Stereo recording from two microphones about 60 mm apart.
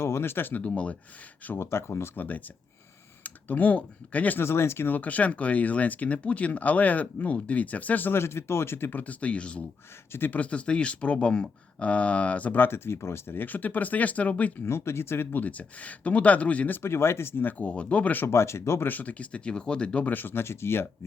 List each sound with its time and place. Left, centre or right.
0.0 s speech: left
0.6 s speech: left
1.5 s speech: left
2.1 s speech: left
4.4 s speech: left
4.9 s speech: left
10.1 s speech: left
10.3 s speech: left
14.6 s speech: left
16.7 s speech: left
17.6 s speech: left
18.3 s speech: left
18.9 s speech: left
20.1 s speech: left